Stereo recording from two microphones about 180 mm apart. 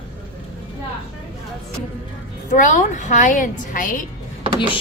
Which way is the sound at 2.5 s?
45° left (ahead or behind).